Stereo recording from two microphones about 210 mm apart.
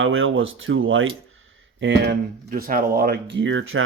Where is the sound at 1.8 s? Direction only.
50° right (ahead or behind); by 3.8 s 70° right (ahead or behind).